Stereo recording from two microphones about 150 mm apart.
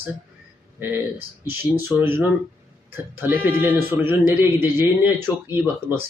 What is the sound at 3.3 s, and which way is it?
Speech, 15° right (ahead or behind).